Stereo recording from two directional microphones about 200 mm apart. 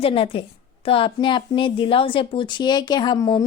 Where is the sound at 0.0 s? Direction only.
30° left (ahead or behind).